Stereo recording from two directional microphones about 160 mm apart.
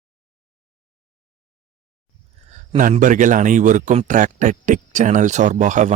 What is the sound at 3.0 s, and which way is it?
A man's voice, 55° right (ahead or behind).